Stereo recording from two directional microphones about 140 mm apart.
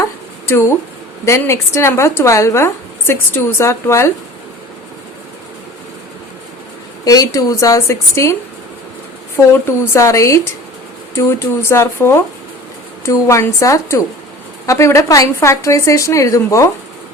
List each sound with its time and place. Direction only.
0.4 s speech: 20° left (ahead or behind)
7.0 s speech: 25° left (ahead or behind)